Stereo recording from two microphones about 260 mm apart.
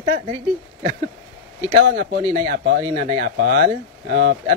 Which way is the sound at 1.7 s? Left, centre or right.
Right.